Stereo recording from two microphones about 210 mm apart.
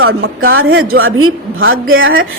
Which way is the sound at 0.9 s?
80° right.